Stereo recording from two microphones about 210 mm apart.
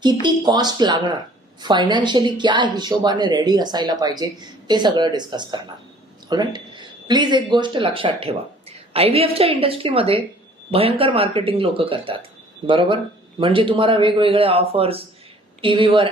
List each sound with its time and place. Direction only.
0.0 s speech: 20° right (ahead or behind)